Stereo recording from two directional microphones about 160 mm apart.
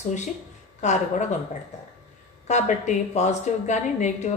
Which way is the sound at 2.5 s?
50° left (ahead or behind).